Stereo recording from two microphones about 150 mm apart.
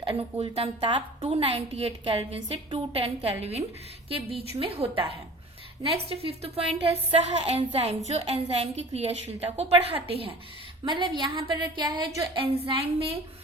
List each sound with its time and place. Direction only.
0.0 s a woman's voice: 40° right (ahead or behind)